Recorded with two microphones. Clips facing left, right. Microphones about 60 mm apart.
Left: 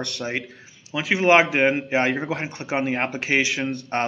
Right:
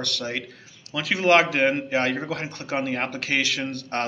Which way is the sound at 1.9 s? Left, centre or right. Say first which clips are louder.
Left 2 dB; centre.